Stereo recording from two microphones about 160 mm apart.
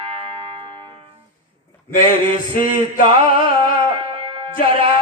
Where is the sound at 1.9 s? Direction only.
60° left (ahead or behind).